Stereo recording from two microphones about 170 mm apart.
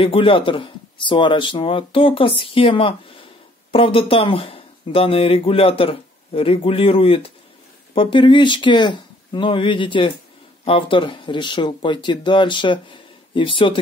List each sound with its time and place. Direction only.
0.0 s speech: 30° left (ahead or behind)